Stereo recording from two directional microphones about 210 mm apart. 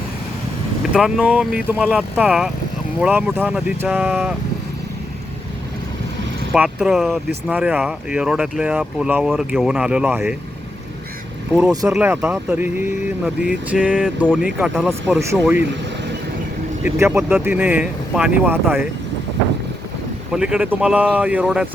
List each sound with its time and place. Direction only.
0.9 s speech: centre (ahead or behind)
6.5 s speech: centre (ahead or behind)
11.7 s speech: 15° right (ahead or behind)
17.0 s speech: 10° right (ahead or behind)
20.3 s speech: 5° right (ahead or behind)